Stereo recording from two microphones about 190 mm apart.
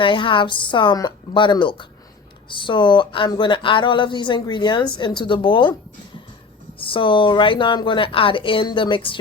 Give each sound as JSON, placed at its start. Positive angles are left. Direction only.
{"t": 0.0, "sound": "speech", "side_deg": 25}
{"t": 6.7, "sound": "speech", "side_deg": 30}